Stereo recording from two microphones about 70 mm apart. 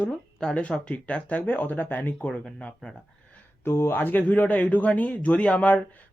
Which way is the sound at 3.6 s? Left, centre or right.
Left.